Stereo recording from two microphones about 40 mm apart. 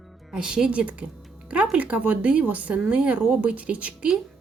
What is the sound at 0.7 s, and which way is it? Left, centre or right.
Speech, right.